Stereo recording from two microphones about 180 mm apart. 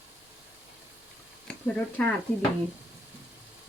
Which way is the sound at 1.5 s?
5° left (ahead or behind).